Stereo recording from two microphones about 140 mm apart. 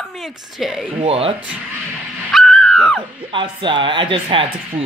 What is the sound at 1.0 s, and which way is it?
Speech, 45° right (ahead or behind).